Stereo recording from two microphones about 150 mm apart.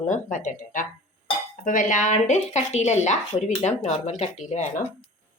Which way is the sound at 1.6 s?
60° left (ahead or behind).